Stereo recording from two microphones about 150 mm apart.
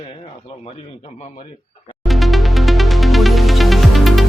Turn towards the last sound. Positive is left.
turn(degrees=0)  # may be behind; listen again after turning